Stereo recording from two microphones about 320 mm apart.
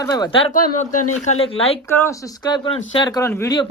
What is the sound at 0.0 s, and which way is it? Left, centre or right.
Speech, centre.